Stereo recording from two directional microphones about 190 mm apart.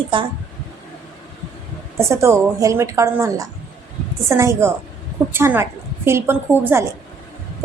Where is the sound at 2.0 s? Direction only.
15° right (ahead or behind).